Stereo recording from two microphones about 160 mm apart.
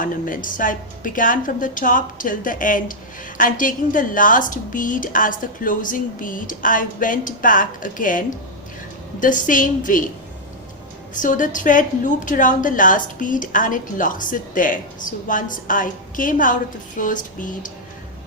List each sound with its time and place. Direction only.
0.0 s a woman's voice: 55° left (ahead or behind)
9.2 s a woman's voice: 55° left (ahead or behind)
11.1 s a woman's voice: 55° left (ahead or behind)